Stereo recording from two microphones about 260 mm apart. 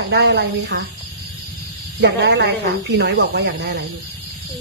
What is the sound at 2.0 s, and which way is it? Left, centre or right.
Speech, right.